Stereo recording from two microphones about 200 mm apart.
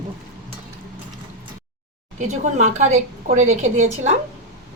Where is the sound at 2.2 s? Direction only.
35° right (ahead or behind).